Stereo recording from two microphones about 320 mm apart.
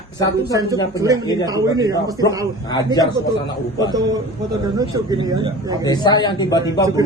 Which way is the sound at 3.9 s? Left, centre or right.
Centre.